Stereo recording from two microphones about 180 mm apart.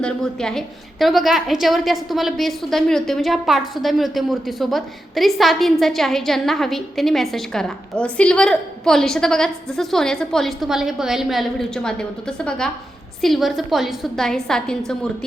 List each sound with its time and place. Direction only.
0.0 s a woman's voice: 5° left (ahead or behind)